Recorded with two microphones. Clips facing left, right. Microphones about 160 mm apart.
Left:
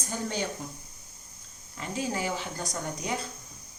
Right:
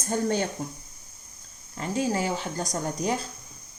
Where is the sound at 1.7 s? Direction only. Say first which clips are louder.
Right 5 dB; 40° right (ahead or behind).